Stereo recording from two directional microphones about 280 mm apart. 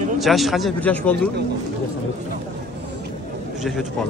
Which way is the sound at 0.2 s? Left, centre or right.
Centre.